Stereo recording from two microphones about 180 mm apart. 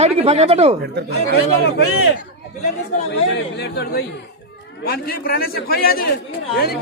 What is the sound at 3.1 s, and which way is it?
Speech, 70° left (ahead or behind).